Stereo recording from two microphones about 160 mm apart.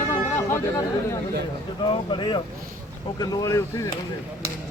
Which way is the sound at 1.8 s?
30° left (ahead or behind).